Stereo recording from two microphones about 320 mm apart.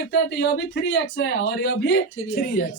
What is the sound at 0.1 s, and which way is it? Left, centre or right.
Speech, left.